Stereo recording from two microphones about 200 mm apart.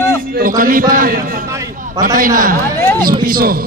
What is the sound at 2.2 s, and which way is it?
A man's voice, 45° right (ahead or behind).